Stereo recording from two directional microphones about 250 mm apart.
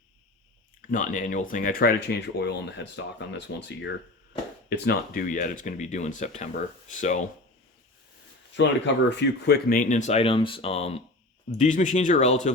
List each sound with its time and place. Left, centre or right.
0.8 s speech: left
8.5 s speech: left